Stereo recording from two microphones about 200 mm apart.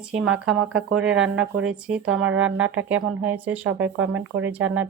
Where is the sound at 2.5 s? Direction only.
75° right (ahead or behind).